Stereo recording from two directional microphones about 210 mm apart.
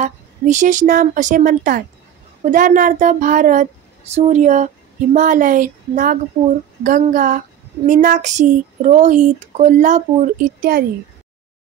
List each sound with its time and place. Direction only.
0.0 s speech: 35° right (ahead or behind)